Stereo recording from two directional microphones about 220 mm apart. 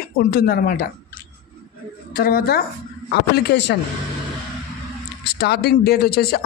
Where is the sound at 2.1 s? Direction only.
45° left (ahead or behind).